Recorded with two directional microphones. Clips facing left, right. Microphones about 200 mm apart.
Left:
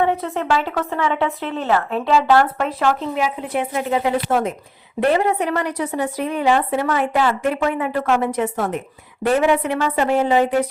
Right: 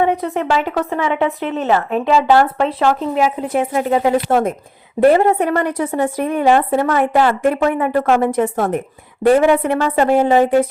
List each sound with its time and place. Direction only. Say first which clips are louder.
0.0 s a woman's voice: right 3 dB; 15° right (ahead or behind)
3.0 s a woman's voice: right 5 dB; 45° right (ahead or behind)